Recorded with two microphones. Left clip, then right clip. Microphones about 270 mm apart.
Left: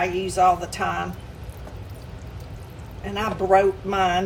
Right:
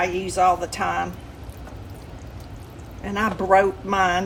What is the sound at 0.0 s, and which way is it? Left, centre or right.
A woman's voice, right.